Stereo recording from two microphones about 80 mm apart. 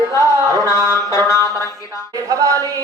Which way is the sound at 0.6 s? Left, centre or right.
Left.